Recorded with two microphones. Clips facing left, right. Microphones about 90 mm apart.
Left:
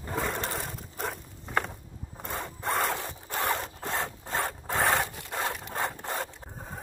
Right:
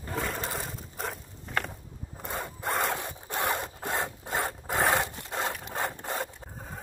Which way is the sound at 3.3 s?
20° right (ahead or behind).